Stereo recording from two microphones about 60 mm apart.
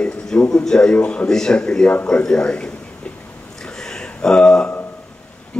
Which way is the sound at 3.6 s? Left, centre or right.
Centre.